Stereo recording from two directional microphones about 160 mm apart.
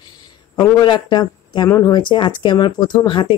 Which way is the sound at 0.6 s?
25° left (ahead or behind).